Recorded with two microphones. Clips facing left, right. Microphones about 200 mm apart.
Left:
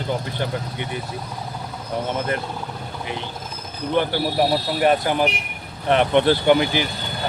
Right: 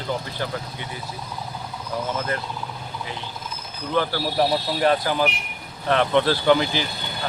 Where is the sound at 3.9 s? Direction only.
15° left (ahead or behind).